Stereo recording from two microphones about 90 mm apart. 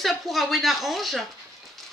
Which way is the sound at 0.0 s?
Centre (ahead or behind).